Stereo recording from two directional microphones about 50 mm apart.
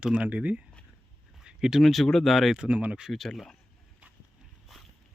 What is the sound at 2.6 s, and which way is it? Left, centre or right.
Speech, right.